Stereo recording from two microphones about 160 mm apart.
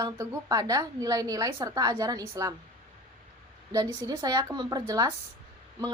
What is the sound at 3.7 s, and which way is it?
A woman's voice, 25° right (ahead or behind).